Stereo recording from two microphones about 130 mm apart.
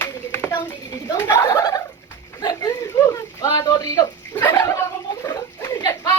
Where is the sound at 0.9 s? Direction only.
30° left (ahead or behind).